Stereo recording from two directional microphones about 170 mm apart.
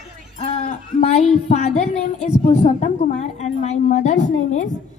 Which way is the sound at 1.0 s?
40° left (ahead or behind).